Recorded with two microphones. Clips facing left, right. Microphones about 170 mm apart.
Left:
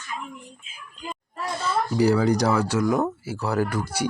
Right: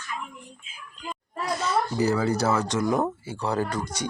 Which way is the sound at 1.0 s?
30° left (ahead or behind).